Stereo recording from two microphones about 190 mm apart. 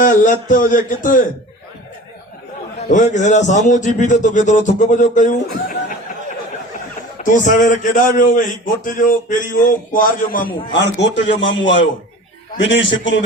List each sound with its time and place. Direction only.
0.0 s a man's voice: 45° left (ahead or behind)
2.9 s a man's voice: 40° left (ahead or behind)
7.2 s a man's voice: 40° left (ahead or behind)
10.7 s a man's voice: 65° left (ahead or behind)